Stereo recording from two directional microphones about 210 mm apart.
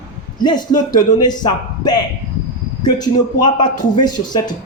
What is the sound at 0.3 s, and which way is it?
Speech, 20° left (ahead or behind).